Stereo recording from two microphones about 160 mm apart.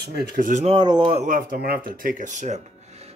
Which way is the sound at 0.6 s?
30° right (ahead or behind).